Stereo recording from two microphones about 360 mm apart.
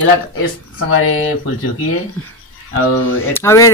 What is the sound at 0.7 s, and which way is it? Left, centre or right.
Speech, left.